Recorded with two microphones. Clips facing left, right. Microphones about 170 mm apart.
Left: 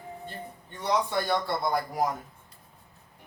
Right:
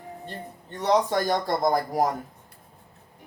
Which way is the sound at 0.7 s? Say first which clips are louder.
Right 5 dB; 45° right (ahead or behind).